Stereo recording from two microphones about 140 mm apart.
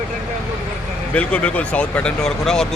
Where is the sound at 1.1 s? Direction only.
10° left (ahead or behind).